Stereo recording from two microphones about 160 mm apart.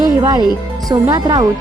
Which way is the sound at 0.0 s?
25° right (ahead or behind).